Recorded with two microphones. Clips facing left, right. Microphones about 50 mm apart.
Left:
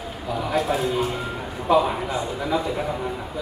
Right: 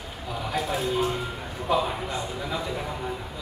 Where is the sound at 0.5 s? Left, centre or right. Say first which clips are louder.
Left 4 dB; centre.